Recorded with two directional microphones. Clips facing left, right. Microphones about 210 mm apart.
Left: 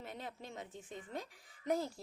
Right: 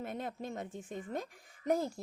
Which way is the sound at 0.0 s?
50° right (ahead or behind).